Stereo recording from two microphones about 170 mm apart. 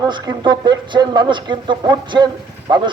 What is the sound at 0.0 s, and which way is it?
Speech, 25° right (ahead or behind).